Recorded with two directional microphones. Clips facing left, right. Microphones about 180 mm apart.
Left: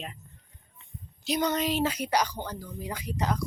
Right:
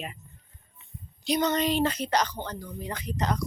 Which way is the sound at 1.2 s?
5° left (ahead or behind).